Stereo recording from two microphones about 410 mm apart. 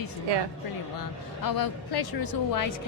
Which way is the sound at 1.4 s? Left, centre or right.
Left.